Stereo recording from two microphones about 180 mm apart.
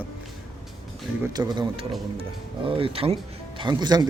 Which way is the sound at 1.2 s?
20° right (ahead or behind).